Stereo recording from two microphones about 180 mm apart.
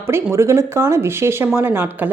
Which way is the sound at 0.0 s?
15° right (ahead or behind).